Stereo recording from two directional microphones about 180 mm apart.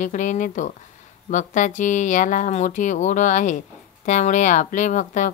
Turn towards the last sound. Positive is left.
turn(degrees=45)  # may be behind; listen again after turning